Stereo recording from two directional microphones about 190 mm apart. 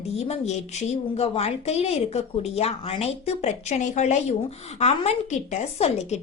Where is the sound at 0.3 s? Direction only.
35° left (ahead or behind).